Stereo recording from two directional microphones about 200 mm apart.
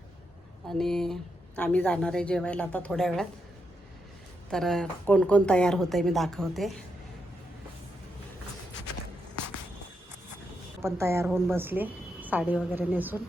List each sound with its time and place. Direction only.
0.7 s a woman's voice: centre (ahead or behind)
4.5 s a woman's voice: centre (ahead or behind)
10.8 s a woman's voice: 15° right (ahead or behind)